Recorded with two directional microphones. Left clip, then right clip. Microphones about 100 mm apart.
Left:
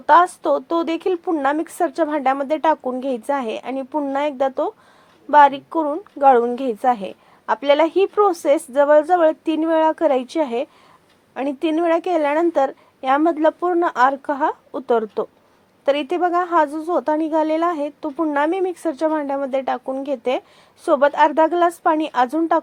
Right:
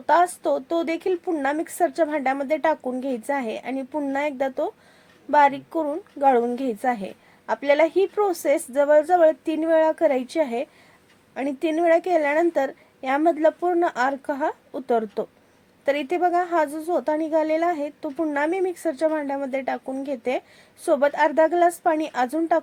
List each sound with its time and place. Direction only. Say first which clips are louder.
0.0 s a woman's voice: left 5 dB; 15° left (ahead or behind)